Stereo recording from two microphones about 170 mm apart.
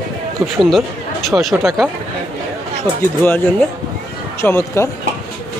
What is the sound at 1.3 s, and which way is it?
Speech, 10° right (ahead or behind).